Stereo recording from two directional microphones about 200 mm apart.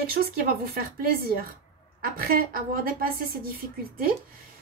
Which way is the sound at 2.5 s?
45° right (ahead or behind).